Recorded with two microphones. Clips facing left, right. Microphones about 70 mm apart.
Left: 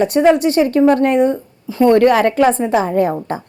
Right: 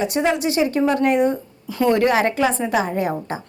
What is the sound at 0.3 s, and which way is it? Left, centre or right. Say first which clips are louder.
A woman's voice: left 8 dB; left.